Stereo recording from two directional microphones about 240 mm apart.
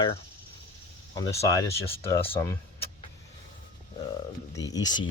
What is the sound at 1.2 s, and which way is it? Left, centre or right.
Speech, centre.